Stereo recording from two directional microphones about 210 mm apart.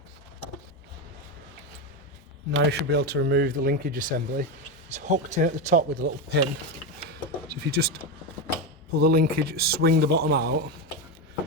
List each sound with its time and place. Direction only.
2.6 s speech: 50° right (ahead or behind); by 6.1 s 35° right (ahead or behind)
6.3 s speech: 55° right (ahead or behind)
7.1 s a sound: 50° right (ahead or behind)
9.0 s speech: 50° right (ahead or behind)